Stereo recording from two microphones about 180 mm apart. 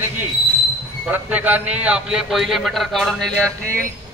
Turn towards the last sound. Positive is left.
turn(degrees=5)  # may be behind; listen again after turning